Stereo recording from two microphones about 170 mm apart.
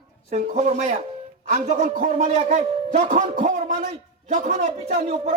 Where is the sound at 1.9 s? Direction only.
55° right (ahead or behind).